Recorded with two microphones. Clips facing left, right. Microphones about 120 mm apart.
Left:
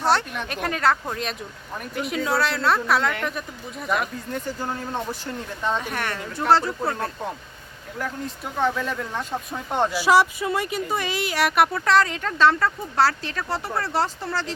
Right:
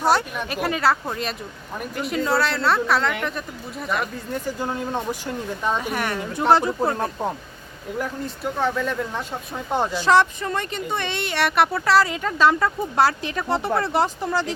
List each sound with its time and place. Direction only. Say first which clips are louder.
0.0 s speech: right 2 dB; 10° right (ahead or behind)
4.4 s speech: right 3 dB; 15° right (ahead or behind)
8.5 s speech: even; centre (ahead or behind)
9.9 s speech: right 1 dB; 10° left (ahead or behind); by 14.5 s 15° right (ahead or behind)